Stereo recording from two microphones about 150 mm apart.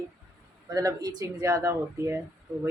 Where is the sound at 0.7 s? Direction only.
25° right (ahead or behind).